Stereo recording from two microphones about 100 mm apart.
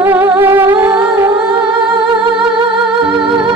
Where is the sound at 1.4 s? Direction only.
10° right (ahead or behind).